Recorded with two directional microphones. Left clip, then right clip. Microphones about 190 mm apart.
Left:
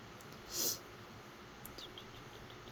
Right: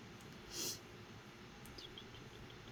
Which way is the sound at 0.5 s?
15° right (ahead or behind).